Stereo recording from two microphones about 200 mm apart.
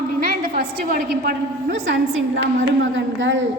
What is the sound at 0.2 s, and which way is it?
A woman's voice, 50° right (ahead or behind).